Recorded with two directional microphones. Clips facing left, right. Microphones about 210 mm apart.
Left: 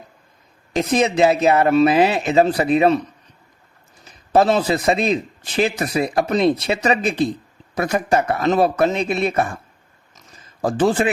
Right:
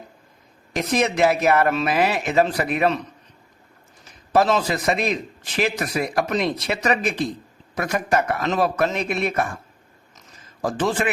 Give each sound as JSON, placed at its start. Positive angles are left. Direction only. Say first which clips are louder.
{"t": 0.8, "sound": "a man's voice", "louder": "left 3 dB", "side_deg": 25}
{"t": 4.4, "sound": "a man's voice", "louder": "left 3 dB", "side_deg": 30}
{"t": 10.6, "sound": "speech", "louder": "left 5 dB", "side_deg": 30}